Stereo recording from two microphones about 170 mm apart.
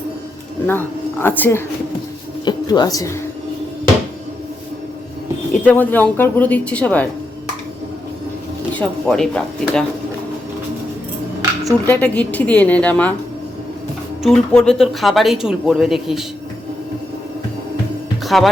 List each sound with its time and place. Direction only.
0.7 s a woman's voice: 10° left (ahead or behind)
2.4 s speech: 25° left (ahead or behind)
5.6 s speech: 10° left (ahead or behind)
8.7 s speech: 5° left (ahead or behind)
11.9 s speech: 10° left (ahead or behind)
14.2 s speech: 5° left (ahead or behind)
18.3 s speech: centre (ahead or behind)